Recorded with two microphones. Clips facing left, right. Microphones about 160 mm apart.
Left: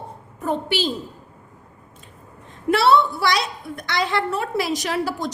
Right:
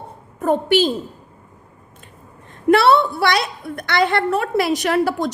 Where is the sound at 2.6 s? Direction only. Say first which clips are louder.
Right 3 dB; 60° right (ahead or behind).